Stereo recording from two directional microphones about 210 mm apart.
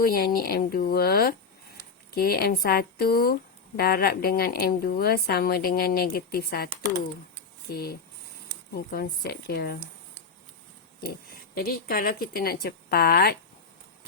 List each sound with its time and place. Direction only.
0.0 s a woman's voice: 45° left (ahead or behind)
7.7 s a woman's voice: 50° left (ahead or behind)
11.5 s a woman's voice: 45° left (ahead or behind)